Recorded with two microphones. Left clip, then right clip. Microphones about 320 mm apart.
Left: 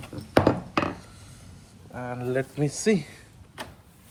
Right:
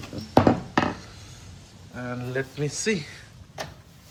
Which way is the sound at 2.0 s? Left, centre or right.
Left.